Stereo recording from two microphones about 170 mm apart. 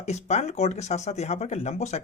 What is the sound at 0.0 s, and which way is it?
Speech, 40° left (ahead or behind).